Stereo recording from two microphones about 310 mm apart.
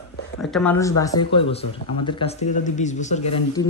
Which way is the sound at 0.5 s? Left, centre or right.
Centre.